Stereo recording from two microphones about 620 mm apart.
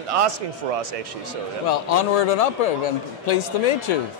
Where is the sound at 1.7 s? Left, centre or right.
Left.